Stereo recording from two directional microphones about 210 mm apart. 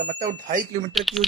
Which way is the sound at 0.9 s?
Centre (ahead or behind).